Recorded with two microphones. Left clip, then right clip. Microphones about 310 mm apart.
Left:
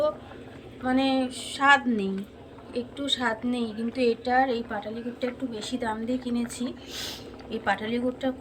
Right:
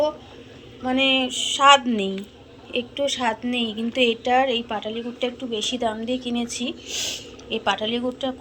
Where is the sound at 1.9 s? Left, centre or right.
Centre.